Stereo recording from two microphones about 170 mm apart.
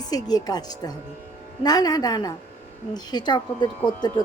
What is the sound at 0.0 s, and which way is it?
A woman's voice, 25° left (ahead or behind).